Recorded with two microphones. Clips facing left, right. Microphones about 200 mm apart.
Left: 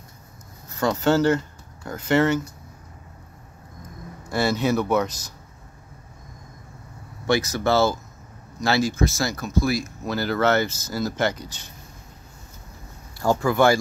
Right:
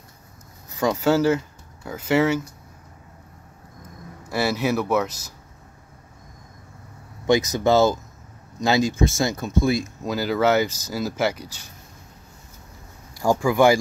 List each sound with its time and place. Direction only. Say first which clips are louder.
0.7 s speech: right 1 dB; 15° right (ahead or behind)
4.3 s speech: left 1 dB; 5° right (ahead or behind)
7.2 s speech: right 3 dB; 20° right (ahead or behind)
10.0 s speech: right 1 dB; 10° right (ahead or behind)
13.2 s speech: right 1 dB; 10° right (ahead or behind)